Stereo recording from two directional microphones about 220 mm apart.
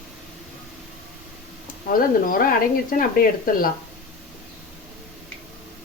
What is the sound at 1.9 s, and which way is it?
Speech, 40° left (ahead or behind).